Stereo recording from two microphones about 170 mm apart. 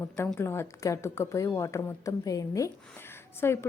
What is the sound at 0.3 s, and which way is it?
A woman's voice, 15° left (ahead or behind).